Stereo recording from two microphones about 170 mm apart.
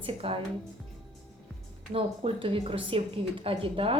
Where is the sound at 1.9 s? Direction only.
35° right (ahead or behind).